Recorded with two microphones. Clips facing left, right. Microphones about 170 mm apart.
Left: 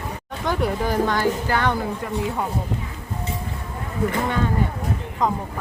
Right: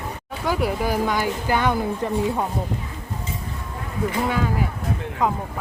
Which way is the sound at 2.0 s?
30° right (ahead or behind).